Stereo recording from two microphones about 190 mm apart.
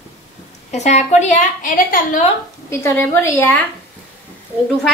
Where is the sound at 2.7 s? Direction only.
15° left (ahead or behind).